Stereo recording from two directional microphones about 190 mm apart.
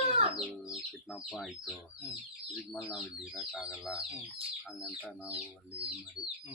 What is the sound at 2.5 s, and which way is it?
Speech, centre (ahead or behind).